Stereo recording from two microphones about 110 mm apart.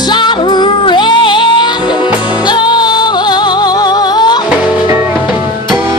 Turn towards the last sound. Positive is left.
turn(degrees=-20)  # may be behind; listen again after turning